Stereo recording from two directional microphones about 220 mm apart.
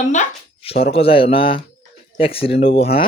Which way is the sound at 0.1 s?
30° left (ahead or behind).